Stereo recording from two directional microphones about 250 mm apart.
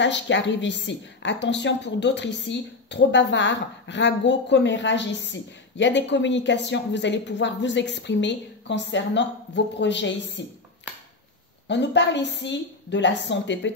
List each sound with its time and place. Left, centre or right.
0.0 s a woman's voice: left
11.6 s a woman's voice: left